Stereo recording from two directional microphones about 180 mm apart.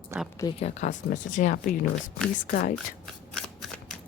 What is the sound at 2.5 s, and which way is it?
Speech, 55° left (ahead or behind).